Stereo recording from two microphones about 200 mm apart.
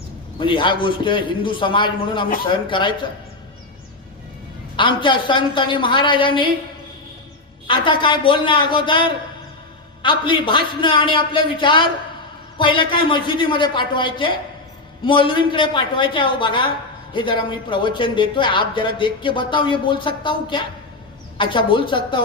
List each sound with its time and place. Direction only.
0.3 s speech: 25° left (ahead or behind)
4.8 s speech: 25° left (ahead or behind)
7.7 s speech: 25° left (ahead or behind)